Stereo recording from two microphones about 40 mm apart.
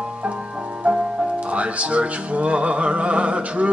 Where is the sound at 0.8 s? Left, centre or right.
Right.